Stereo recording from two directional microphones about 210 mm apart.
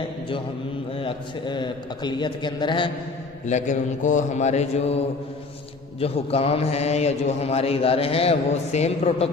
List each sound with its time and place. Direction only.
0.9 s a man's voice: 25° left (ahead or behind)
3.4 s a man's voice: 35° left (ahead or behind)